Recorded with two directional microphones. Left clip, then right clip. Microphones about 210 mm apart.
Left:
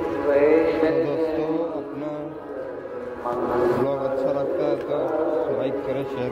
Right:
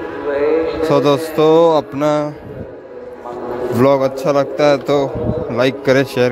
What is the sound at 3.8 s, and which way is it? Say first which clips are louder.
Speech: right 10 dB; 65° right (ahead or behind).